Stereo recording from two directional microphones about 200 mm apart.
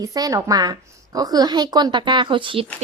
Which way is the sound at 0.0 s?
15° right (ahead or behind).